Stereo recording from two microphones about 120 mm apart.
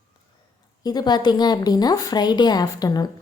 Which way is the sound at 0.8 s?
35° left (ahead or behind).